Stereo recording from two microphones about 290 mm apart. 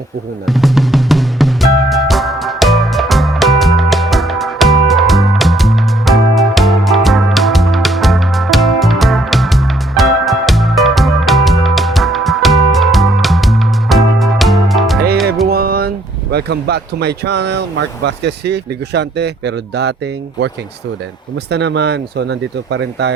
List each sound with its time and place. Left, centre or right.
0.4 s music: centre
15.4 s music: right
16.3 s speech: right
21.5 s speech: right